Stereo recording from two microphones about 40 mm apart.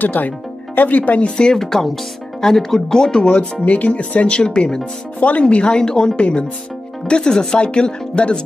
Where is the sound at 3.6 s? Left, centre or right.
Left.